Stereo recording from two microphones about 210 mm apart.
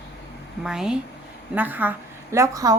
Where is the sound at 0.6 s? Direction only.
5° right (ahead or behind).